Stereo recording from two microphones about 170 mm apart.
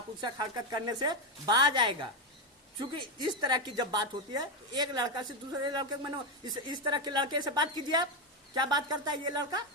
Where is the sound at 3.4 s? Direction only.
25° right (ahead or behind).